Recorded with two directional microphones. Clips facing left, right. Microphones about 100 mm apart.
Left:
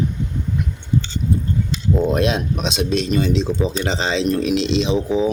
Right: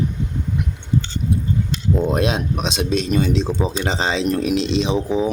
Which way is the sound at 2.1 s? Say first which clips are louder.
Left 1 dB; 40° right (ahead or behind).